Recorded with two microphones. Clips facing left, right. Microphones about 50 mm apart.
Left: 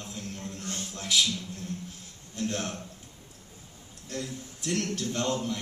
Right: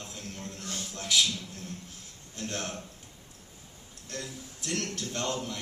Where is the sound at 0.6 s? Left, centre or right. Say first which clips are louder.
Left 1 dB; left.